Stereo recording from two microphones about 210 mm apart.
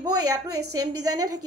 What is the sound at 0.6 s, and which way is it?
Speech, 90° right.